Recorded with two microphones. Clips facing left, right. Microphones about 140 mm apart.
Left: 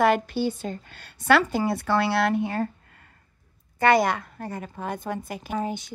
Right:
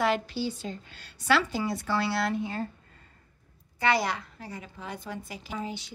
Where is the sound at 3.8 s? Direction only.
50° left (ahead or behind).